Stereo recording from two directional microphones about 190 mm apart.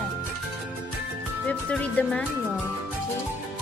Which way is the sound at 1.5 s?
5° left (ahead or behind).